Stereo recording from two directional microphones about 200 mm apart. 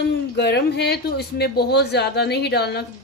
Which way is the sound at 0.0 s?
55° left (ahead or behind).